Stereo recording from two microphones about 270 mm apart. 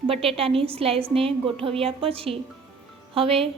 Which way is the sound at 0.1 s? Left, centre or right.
Right.